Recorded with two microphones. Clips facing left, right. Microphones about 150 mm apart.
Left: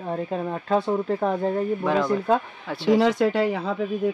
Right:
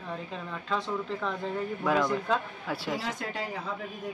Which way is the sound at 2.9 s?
90° left.